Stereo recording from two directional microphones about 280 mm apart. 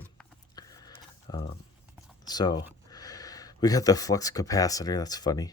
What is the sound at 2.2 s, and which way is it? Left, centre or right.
Speech, centre.